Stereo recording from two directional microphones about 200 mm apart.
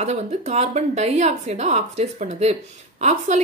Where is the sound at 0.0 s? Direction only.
35° right (ahead or behind).